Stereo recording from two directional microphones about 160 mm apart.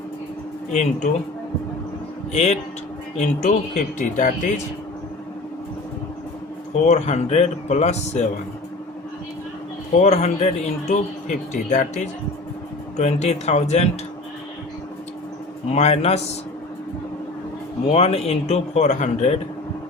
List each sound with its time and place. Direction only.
0.7 s speech: 50° left (ahead or behind)
2.3 s speech: 45° left (ahead or behind)
6.8 s speech: 45° left (ahead or behind)
9.9 s speech: 45° left (ahead or behind)
15.7 s speech: 40° left (ahead or behind)
17.9 s speech: 40° left (ahead or behind)